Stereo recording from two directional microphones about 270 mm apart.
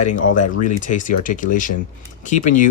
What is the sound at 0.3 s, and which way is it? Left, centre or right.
Speech, left.